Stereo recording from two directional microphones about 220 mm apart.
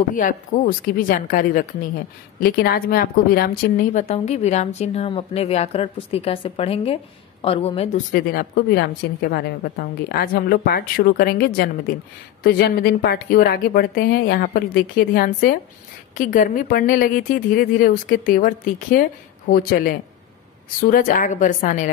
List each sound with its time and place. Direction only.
0.1 s a woman's voice: 35° left (ahead or behind)
8.1 s a woman's voice: 45° left (ahead or behind)